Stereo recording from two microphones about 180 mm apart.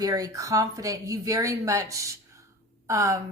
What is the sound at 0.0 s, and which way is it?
A woman's voice, 20° right (ahead or behind).